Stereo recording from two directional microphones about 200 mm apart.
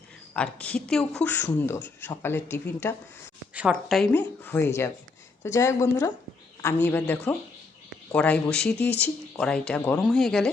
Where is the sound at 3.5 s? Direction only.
5° right (ahead or behind).